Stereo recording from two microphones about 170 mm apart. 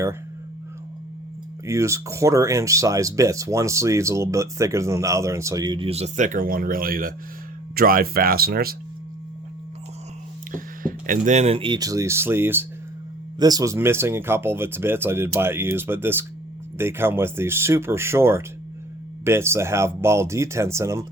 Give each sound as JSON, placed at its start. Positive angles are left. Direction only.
{"t": 1.6, "sound": "speech", "side_deg": -15}
{"t": 10.5, "sound": "speech", "side_deg": -55}